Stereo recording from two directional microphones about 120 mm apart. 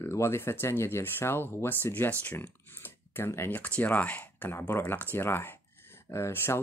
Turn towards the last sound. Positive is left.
turn(degrees=20)  # may be behind; listen again after turning